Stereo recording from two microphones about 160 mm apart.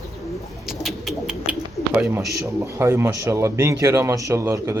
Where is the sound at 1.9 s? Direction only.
5° right (ahead or behind).